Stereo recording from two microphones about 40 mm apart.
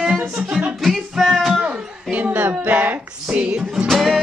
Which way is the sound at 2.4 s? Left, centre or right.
Right.